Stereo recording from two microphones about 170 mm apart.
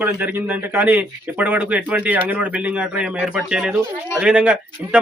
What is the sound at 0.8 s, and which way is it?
A man's voice, 10° right (ahead or behind).